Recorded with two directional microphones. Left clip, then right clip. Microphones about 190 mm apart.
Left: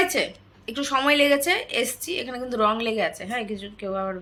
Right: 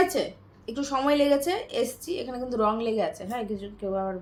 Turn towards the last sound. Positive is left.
turn(degrees=5)  # may be behind; listen again after turning